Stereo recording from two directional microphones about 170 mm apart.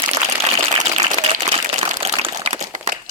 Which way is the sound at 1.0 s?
40° right (ahead or behind).